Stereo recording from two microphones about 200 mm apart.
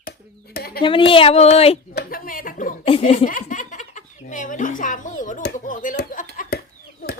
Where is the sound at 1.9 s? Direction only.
50° left (ahead or behind).